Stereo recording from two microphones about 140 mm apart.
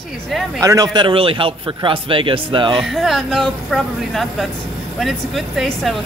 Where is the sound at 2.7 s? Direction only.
Centre (ahead or behind).